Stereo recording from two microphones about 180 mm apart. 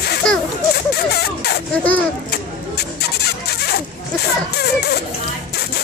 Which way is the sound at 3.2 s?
65° left (ahead or behind).